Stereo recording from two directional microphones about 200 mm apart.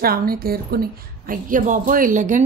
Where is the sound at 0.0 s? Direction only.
50° right (ahead or behind).